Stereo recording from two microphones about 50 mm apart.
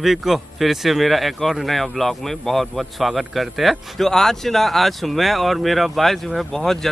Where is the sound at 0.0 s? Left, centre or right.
Centre.